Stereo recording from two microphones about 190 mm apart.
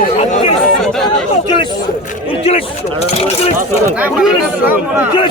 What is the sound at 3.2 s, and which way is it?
Speech, 35° left (ahead or behind).